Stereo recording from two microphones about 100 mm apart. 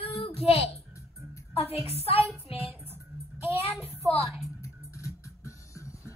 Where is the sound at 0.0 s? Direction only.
80° left.